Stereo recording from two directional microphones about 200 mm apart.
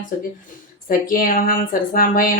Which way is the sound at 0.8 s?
45° left (ahead or behind).